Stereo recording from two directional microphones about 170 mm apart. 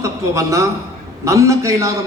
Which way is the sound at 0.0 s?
20° right (ahead or behind).